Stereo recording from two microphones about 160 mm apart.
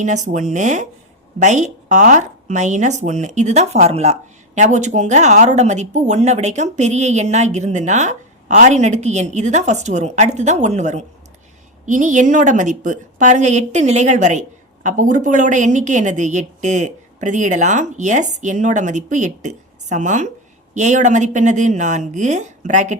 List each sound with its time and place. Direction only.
0.0 s a woman's voice: 50° right (ahead or behind)